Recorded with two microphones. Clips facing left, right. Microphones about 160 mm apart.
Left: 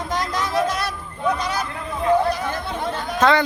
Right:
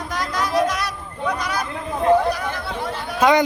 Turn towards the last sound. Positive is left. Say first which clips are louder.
# right 1 dB
turn(degrees=-15)  # may be behind; listen again after turning